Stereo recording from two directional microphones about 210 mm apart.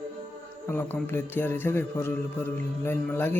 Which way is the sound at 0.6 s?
10° left (ahead or behind).